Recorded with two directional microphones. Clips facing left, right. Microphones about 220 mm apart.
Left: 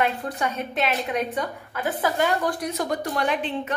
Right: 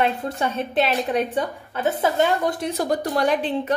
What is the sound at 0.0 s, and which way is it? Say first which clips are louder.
A woman's voice: right 2 dB; 30° right (ahead or behind).